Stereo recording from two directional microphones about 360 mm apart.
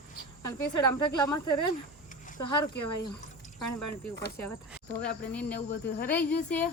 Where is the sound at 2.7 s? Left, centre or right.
Left.